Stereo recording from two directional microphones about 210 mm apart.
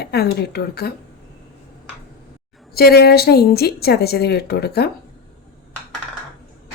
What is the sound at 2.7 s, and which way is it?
Speech, 50° left (ahead or behind).